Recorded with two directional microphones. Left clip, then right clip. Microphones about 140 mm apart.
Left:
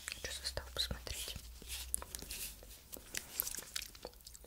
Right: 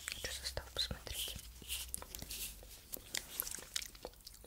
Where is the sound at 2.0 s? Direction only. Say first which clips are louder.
Left 2 dB; centre (ahead or behind).